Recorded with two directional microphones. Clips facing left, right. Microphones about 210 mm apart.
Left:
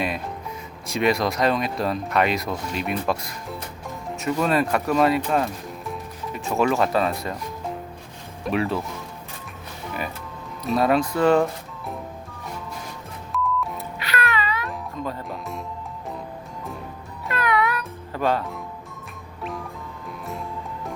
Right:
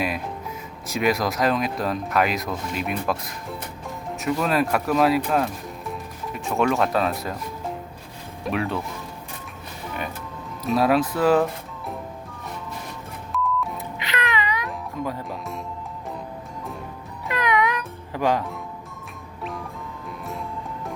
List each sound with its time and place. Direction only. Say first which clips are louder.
0.9 s speech: left 1 dB; centre (ahead or behind)
10.6 s speech: even; centre (ahead or behind)
13.3 s music: even; centre (ahead or behind)
14.0 s music: left 1 dB; 20° right (ahead or behind)
15.3 s music: even; centre (ahead or behind)
17.2 s music: even; 15° right (ahead or behind)
19.4 s music: left 1 dB; centre (ahead or behind)